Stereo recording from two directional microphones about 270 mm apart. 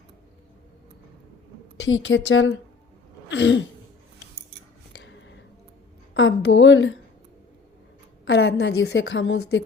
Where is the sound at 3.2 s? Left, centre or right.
Left.